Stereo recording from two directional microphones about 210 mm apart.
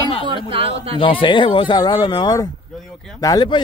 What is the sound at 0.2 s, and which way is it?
Speech, 25° right (ahead or behind).